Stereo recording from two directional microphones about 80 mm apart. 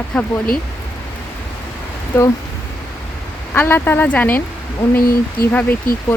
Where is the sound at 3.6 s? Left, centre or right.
Left.